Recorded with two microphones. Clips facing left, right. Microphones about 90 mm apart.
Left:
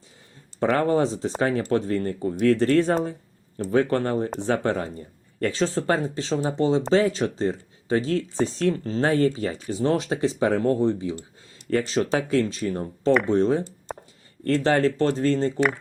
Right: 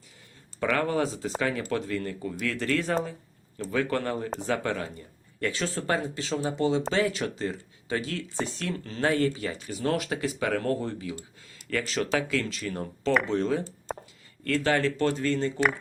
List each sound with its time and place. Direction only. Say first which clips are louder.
0.6 s speech: left 5 dB; 35° left (ahead or behind)
13.9 s a sound: right 1 dB; centre (ahead or behind)
14.4 s speech: left 5 dB; 35° left (ahead or behind)